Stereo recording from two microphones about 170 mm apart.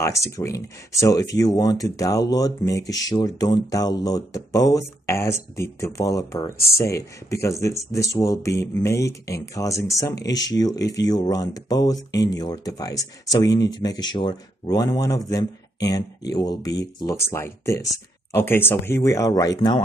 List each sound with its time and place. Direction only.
0.0 s speech: 15° left (ahead or behind)